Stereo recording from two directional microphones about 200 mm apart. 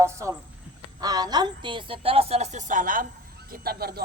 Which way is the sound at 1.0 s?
20° right (ahead or behind).